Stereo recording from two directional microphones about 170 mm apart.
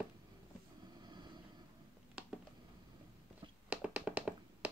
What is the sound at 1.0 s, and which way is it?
Vehicle, 25° right (ahead or behind).